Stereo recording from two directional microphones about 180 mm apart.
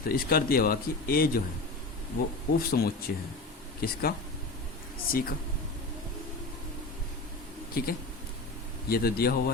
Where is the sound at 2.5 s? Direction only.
55° left (ahead or behind).